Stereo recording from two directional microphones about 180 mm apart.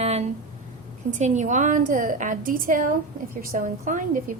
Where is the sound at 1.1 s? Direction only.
40° right (ahead or behind).